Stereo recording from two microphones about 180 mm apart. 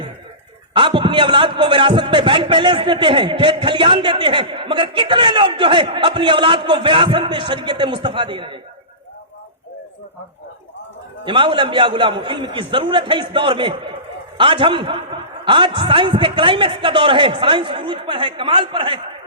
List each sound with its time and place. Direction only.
0.7 s a man's voice: 25° right (ahead or behind)
11.3 s a man's voice: 25° right (ahead or behind)